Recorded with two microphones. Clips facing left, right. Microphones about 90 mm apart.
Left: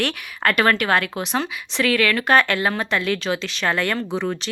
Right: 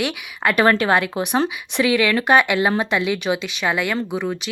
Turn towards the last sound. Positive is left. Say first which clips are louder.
# right 1 dB
turn(degrees=-5)  # may be behind; listen again after turning